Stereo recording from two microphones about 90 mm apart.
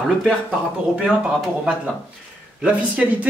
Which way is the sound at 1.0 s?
5° right (ahead or behind).